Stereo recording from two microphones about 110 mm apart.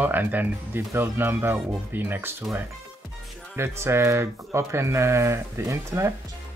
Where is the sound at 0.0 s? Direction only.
15° right (ahead or behind).